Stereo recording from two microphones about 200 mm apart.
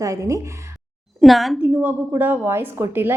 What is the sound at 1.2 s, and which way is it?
A woman's voice, centre (ahead or behind).